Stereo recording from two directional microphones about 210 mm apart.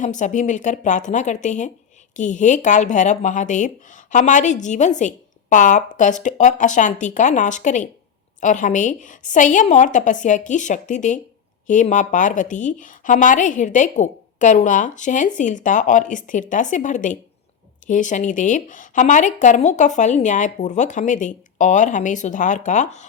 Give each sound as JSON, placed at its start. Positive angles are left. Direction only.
{"t": 0.0, "sound": "speech", "side_deg": 35}